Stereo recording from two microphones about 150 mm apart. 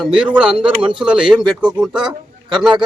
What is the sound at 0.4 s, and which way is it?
Speech, 35° right (ahead or behind).